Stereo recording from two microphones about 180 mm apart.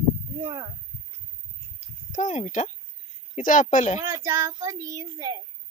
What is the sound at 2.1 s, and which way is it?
Speech, 40° left (ahead or behind).